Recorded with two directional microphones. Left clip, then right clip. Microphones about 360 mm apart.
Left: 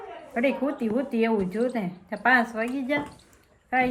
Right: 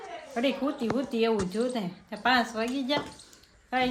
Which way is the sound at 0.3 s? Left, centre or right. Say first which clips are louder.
Left 3 dB; centre.